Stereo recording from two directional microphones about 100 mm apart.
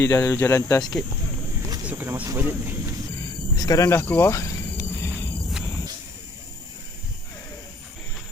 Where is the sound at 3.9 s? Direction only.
20° left (ahead or behind).